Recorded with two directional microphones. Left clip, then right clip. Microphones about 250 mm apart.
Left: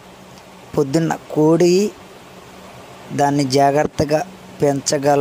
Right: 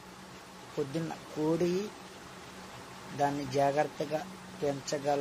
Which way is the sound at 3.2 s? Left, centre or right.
Left.